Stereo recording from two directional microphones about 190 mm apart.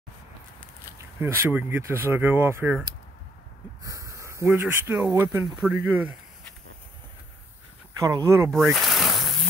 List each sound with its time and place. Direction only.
1.2 s speech: 10° right (ahead or behind)
3.8 s speech: 15° right (ahead or behind)
8.0 s speech: 15° right (ahead or behind)
8.7 s a sound: centre (ahead or behind)